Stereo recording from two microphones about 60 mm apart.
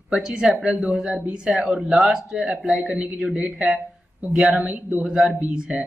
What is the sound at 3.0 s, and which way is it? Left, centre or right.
A man's voice, centre.